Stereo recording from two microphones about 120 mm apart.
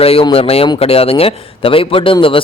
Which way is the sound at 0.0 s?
55° left (ahead or behind).